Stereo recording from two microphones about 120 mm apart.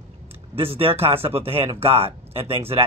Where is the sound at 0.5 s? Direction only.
50° right (ahead or behind).